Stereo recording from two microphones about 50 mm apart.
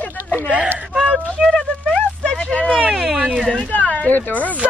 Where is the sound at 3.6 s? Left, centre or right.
Left.